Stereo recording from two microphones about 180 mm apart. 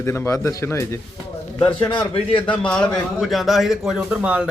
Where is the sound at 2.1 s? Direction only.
30° left (ahead or behind).